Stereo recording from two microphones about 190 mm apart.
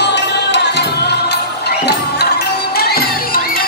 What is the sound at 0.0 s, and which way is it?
Music, 65° left (ahead or behind).